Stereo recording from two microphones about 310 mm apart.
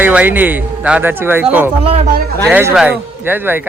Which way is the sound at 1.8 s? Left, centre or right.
Centre.